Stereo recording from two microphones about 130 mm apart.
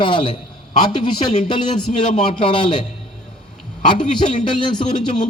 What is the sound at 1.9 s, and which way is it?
Speech, 70° left (ahead or behind).